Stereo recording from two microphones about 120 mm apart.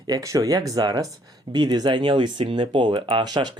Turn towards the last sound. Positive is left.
turn(degrees=-35)  # may be behind; listen again after turning